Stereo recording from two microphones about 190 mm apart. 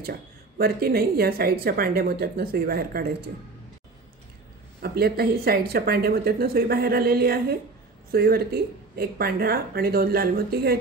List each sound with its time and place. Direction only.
0.0 s speech: 55° right (ahead or behind)
4.8 s speech: 55° right (ahead or behind)